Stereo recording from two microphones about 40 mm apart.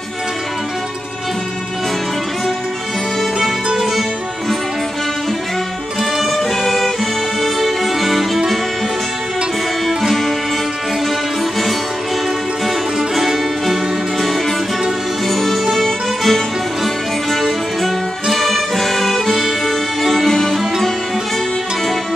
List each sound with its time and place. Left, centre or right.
3.6 s music: centre
6.1 s music: centre
12.6 s music: centre
15.2 s music: centre
20.2 s music: centre